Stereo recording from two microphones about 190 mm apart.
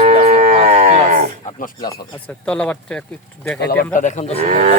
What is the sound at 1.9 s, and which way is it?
Speech, 10° left (ahead or behind).